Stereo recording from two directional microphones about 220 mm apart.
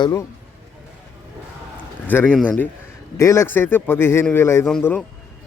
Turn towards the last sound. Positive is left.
turn(degrees=5)  # may be behind; listen again after turning